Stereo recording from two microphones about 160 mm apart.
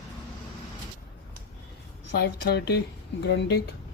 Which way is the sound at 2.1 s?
90° left.